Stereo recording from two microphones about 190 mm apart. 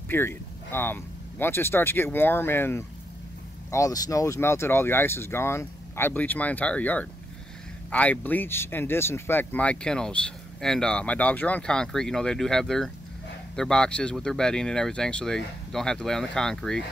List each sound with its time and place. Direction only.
0.1 s speech: 10° left (ahead or behind)